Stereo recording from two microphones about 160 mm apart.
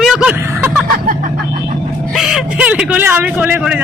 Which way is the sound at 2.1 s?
Centre (ahead or behind).